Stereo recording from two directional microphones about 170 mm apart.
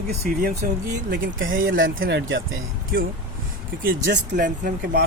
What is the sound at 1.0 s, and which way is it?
Speech, 90° right.